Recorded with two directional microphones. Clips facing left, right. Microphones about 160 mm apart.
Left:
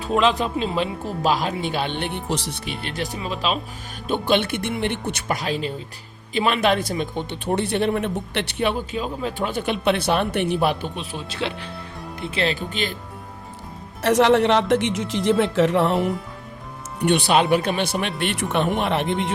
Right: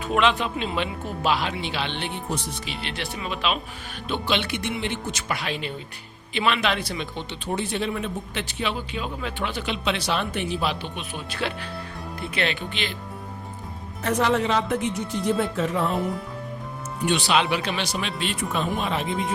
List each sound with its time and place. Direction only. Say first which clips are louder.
0.0 s speech: left 2 dB; 35° left (ahead or behind); by 2.7 s 60° left (ahead or behind)
2.9 s speech: left 4 dB; 40° left (ahead or behind)
4.1 s speech: left 5 dB; 50° left (ahead or behind)
5.3 s speech: left 5 dB; 40° left (ahead or behind); by 10.9 s 55° left (ahead or behind)
10.9 s speech: left 2 dB; 30° left (ahead or behind)
14.0 s speech: left 6 dB; 80° left
17.0 s speech: left 4 dB; 60° left (ahead or behind)
18.2 s speech: left 5 dB; 70° left (ahead or behind)